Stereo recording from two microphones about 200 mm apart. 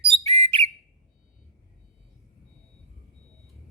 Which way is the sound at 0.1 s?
30° right (ahead or behind).